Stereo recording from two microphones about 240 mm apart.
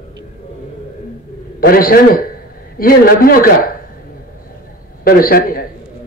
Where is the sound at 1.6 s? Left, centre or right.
Left.